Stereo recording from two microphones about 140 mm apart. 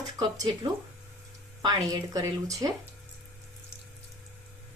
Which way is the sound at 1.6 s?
25° right (ahead or behind).